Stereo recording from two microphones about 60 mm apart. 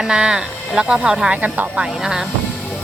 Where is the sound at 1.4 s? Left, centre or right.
Right.